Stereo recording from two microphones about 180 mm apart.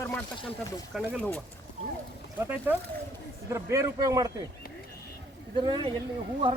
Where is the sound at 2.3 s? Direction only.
10° right (ahead or behind).